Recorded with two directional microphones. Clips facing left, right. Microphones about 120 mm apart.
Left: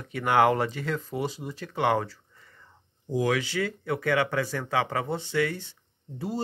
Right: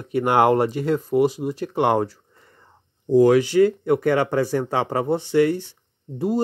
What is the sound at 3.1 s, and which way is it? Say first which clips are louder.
Speech: right 11 dB; 40° right (ahead or behind).